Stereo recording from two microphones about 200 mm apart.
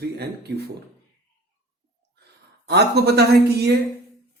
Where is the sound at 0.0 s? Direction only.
55° right (ahead or behind).